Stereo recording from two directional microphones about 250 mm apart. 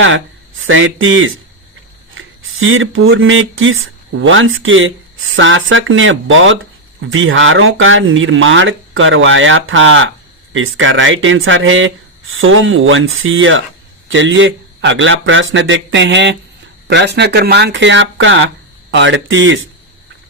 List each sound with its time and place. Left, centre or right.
0.7 s speech: right